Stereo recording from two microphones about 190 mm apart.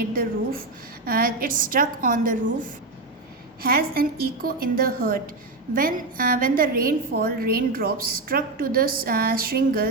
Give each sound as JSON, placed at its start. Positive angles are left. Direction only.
{"t": 0.1, "sound": "a woman's voice", "side_deg": -50}
{"t": 3.6, "sound": "a woman's voice", "side_deg": -50}